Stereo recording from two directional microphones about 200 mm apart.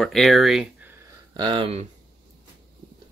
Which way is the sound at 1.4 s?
25° right (ahead or behind).